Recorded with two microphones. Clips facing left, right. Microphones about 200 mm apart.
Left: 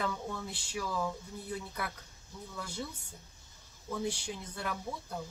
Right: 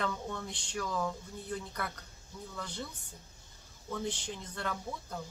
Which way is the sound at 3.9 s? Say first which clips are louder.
Left 1 dB; 10° left (ahead or behind).